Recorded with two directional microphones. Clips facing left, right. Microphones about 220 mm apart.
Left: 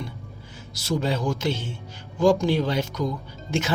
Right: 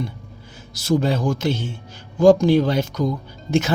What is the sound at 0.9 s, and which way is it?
Speech, 50° right (ahead or behind).